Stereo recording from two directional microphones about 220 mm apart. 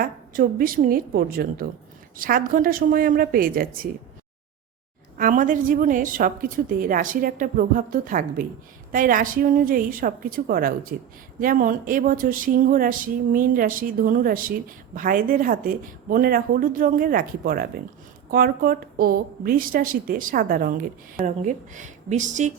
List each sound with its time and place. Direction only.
0.0 s speech: 40° right (ahead or behind)
5.1 s speech: 35° right (ahead or behind)